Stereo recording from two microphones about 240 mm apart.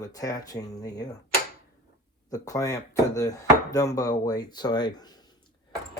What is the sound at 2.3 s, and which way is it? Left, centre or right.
Speech, centre.